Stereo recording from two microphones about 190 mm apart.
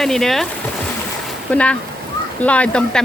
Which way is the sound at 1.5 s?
5° left (ahead or behind).